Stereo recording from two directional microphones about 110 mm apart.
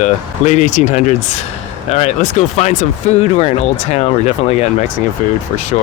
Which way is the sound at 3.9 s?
75° left (ahead or behind).